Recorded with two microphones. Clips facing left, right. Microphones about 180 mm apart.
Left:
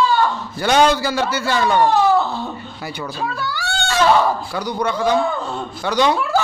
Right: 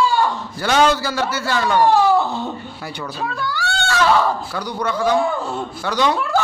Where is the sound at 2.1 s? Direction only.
15° right (ahead or behind).